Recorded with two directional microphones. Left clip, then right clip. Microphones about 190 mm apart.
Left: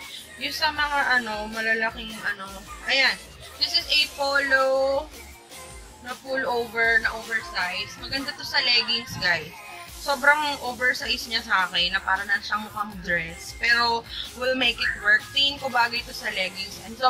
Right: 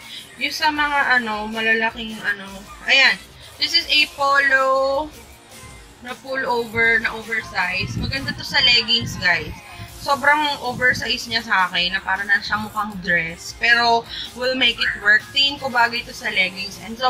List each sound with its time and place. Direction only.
0.4 s a woman's voice: 5° left (ahead or behind)
6.0 s a woman's voice: centre (ahead or behind)